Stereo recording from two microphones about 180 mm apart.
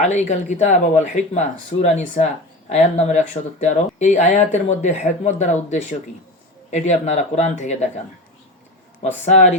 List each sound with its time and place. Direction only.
0.0 s speech: 40° left (ahead or behind)
9.2 s speech: 40° left (ahead or behind)